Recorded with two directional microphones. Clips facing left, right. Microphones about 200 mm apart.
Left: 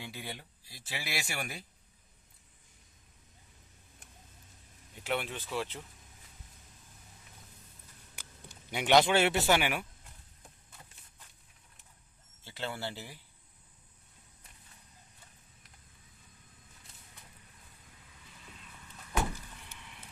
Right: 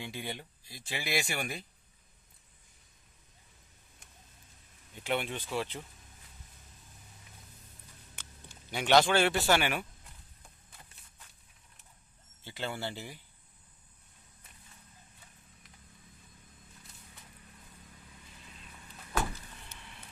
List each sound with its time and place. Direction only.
0.0 s speech: 5° left (ahead or behind)
5.0 s speech: centre (ahead or behind)
8.7 s speech: 20° left (ahead or behind)
12.5 s speech: centre (ahead or behind)
19.1 s a sound: 15° left (ahead or behind)